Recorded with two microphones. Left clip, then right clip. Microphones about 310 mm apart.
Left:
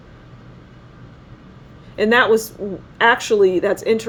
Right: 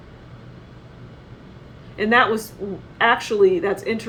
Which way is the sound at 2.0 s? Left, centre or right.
Left.